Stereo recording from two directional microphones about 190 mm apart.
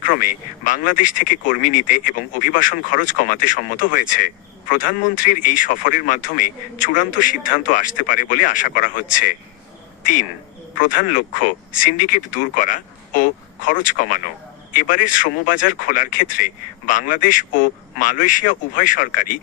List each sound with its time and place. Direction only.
0.0 s speech: 45° left (ahead or behind)